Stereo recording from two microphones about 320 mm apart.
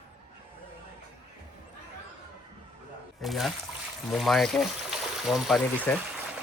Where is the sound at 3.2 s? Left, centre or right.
Centre.